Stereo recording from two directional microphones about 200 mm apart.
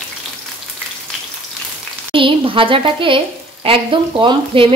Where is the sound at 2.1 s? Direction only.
25° right (ahead or behind).